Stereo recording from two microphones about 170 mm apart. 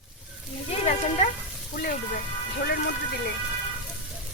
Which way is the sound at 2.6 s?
70° left (ahead or behind).